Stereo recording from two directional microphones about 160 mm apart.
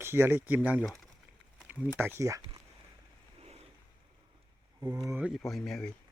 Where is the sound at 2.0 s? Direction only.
15° right (ahead or behind).